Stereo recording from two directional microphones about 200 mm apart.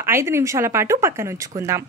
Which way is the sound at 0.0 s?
15° right (ahead or behind).